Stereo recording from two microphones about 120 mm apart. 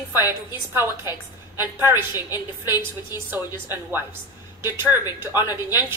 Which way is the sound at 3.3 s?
15° right (ahead or behind).